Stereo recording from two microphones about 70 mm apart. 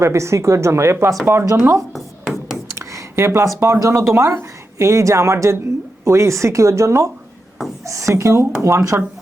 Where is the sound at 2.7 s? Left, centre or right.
Right.